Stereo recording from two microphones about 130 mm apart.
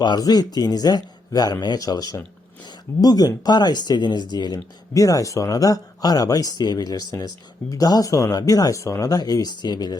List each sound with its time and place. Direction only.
0.0 s speech: 30° left (ahead or behind)